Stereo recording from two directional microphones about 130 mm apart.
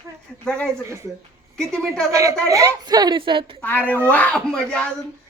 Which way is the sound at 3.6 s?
15° left (ahead or behind).